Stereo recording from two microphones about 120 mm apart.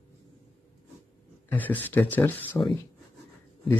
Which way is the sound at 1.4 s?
15° left (ahead or behind).